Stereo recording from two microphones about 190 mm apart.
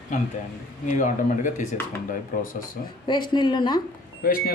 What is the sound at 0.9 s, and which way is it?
Speech, 40° left (ahead or behind).